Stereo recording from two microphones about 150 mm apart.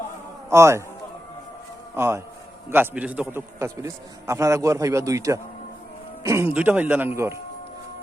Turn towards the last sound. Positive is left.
turn(degrees=-15)  # may be behind; listen again after turning